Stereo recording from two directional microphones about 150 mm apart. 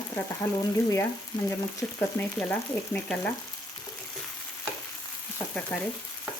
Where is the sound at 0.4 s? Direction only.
10° left (ahead or behind).